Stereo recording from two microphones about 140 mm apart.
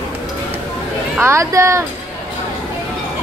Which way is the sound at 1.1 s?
20° right (ahead or behind).